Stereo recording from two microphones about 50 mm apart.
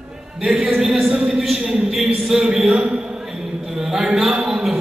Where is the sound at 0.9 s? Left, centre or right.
Centre.